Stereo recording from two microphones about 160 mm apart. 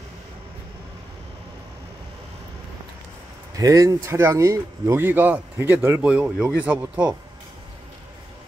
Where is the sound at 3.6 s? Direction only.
20° right (ahead or behind).